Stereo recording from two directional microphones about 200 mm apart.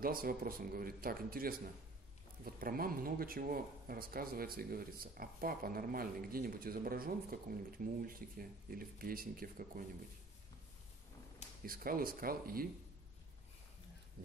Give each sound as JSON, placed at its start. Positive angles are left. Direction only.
{"t": 0.0, "sound": "speech", "side_deg": -45}
{"t": 11.6, "sound": "speech", "side_deg": -45}
{"t": 14.2, "sound": "speech", "side_deg": -45}